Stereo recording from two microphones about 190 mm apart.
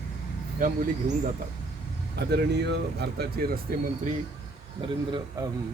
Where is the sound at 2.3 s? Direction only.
60° right (ahead or behind).